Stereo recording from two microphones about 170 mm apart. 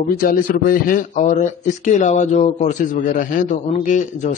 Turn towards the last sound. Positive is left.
turn(degrees=45)  # may be behind; listen again after turning